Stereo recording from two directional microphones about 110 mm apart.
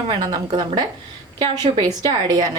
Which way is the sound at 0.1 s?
40° right (ahead or behind).